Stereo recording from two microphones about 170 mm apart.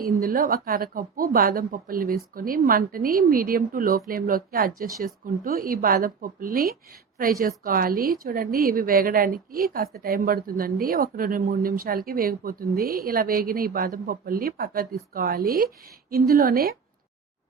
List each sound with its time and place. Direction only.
0.0 s a woman's voice: 55° right (ahead or behind)